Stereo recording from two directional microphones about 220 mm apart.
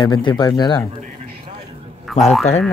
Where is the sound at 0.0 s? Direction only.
20° left (ahead or behind).